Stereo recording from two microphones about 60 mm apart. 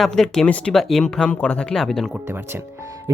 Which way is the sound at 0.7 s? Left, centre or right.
Centre.